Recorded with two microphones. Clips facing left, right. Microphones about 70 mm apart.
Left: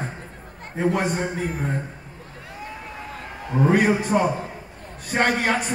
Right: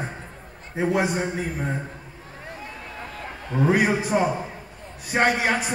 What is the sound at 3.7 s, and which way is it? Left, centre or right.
A man's voice, centre.